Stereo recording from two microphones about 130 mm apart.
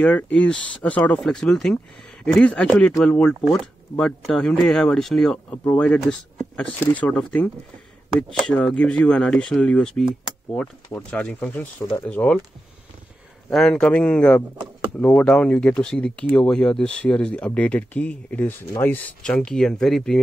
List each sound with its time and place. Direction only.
0.0 s speech: 10° left (ahead or behind)
5.5 s speech: 15° left (ahead or behind)
13.5 s speech: 5° left (ahead or behind)
19.2 s speech: 5° left (ahead or behind)